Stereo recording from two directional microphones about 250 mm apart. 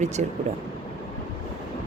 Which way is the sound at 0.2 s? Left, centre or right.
Right.